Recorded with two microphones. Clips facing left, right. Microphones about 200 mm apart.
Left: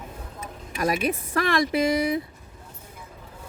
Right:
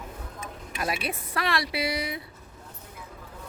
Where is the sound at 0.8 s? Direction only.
45° left (ahead or behind).